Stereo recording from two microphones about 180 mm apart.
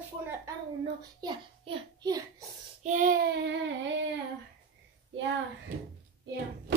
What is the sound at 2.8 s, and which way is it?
Child singing, 45° right (ahead or behind).